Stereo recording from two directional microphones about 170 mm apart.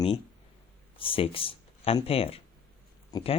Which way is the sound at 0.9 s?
30° left (ahead or behind).